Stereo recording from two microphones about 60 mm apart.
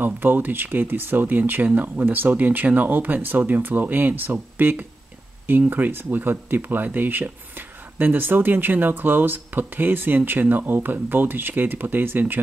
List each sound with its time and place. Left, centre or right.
0.0 s speech: right